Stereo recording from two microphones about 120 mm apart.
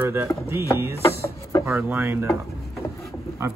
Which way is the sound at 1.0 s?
25° left (ahead or behind).